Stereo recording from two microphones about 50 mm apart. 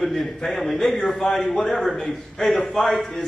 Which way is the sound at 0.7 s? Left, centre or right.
Centre.